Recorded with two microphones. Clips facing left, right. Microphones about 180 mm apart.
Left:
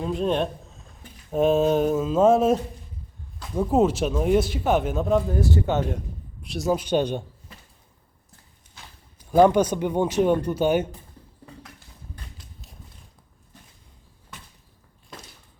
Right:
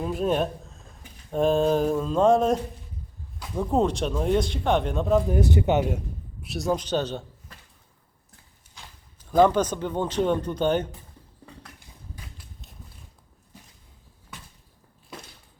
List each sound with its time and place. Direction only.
0.0 s speech: 5° right (ahead or behind)
5.3 s a man's voice: 20° right (ahead or behind)
6.4 s speech: centre (ahead or behind)
9.1 s speech: 10° left (ahead or behind)
12.1 s a sound: 5° right (ahead or behind)